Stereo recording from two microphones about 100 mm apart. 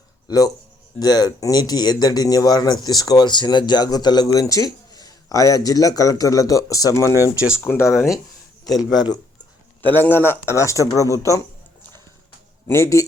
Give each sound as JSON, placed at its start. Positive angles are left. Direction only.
{"t": 0.3, "sound": "a man's voice", "side_deg": 40}
{"t": 9.8, "sound": "a man's voice", "side_deg": 20}
{"t": 11.0, "sound": "speech", "side_deg": -30}
{"t": 12.6, "sound": "a man's voice", "side_deg": 25}